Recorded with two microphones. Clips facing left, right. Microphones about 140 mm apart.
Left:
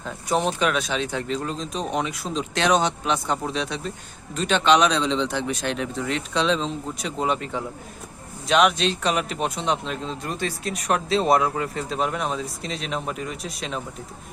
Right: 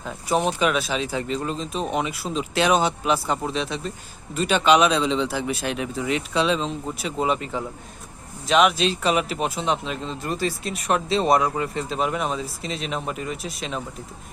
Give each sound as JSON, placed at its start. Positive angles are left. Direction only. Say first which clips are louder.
{"t": 0.0, "sound": "a man's voice", "louder": "right 1 dB", "side_deg": -5}